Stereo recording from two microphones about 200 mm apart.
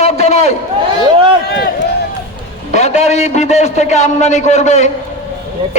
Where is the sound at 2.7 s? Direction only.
35° left (ahead or behind).